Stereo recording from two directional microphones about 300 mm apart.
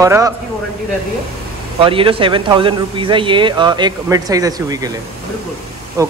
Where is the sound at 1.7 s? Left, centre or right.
Centre.